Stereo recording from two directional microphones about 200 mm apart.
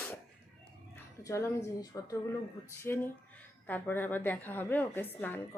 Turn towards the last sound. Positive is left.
turn(degrees=10)  # may be behind; listen again after turning